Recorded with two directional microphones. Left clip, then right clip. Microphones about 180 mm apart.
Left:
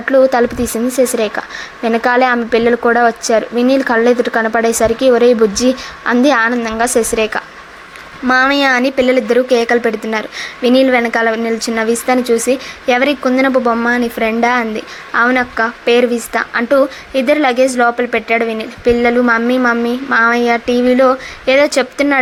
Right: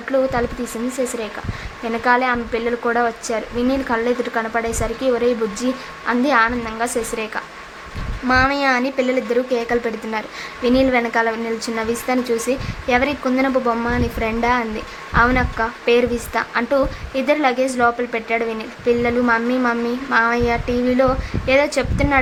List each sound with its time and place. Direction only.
0.0 s a woman's voice: 30° left (ahead or behind)